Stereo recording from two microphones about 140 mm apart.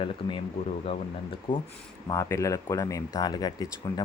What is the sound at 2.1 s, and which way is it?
Speech, 20° left (ahead or behind).